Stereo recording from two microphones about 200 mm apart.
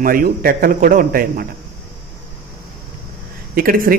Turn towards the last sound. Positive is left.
turn(degrees=-45)  # may be behind; listen again after turning